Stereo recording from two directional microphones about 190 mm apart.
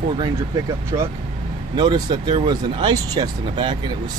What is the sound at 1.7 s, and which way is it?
Speech, 25° right (ahead or behind).